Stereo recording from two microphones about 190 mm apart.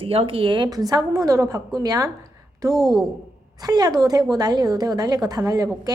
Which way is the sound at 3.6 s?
20° right (ahead or behind).